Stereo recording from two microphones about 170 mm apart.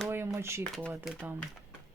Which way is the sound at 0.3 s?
15° right (ahead or behind).